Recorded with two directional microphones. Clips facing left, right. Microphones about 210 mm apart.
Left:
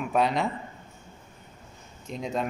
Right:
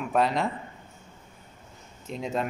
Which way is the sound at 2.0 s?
5° right (ahead or behind).